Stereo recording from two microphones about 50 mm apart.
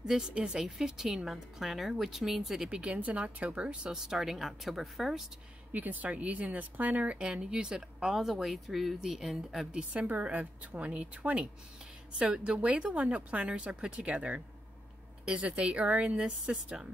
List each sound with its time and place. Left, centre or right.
0.0 s a woman's voice: centre
0.7 s speech: centre
2.7 s speech: right
3.9 s speech: centre
5.7 s speech: right; by 9.7 s centre
9.7 s speech: right